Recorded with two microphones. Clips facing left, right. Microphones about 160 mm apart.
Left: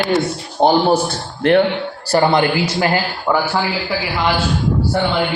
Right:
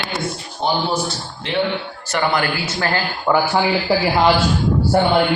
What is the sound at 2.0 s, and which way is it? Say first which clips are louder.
Speech: left 6 dB; 30° left (ahead or behind).